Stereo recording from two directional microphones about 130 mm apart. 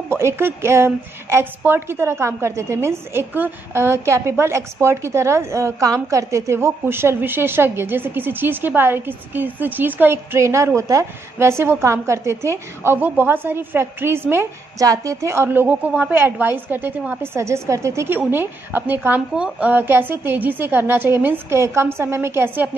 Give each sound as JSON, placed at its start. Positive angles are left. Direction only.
{"t": 0.1, "sound": "a woman's voice", "side_deg": -20}